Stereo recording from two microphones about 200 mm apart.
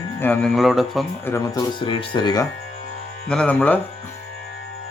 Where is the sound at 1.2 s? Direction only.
15° left (ahead or behind).